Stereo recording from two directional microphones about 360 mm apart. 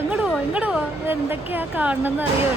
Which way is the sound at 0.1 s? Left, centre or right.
Centre.